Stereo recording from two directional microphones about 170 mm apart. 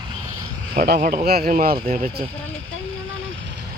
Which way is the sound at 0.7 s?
60° right (ahead or behind).